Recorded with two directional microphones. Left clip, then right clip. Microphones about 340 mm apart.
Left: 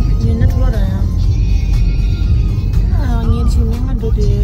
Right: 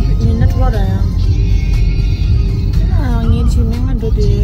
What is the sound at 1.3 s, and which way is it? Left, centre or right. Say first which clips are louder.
Music: right 2 dB; left.